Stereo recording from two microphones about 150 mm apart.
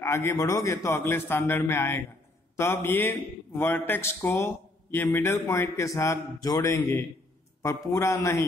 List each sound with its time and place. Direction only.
0.0 s a man's voice: 20° left (ahead or behind)